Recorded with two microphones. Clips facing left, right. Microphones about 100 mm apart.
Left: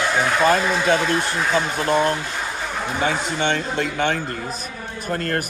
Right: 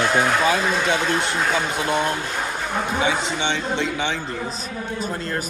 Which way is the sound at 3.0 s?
50° left (ahead or behind).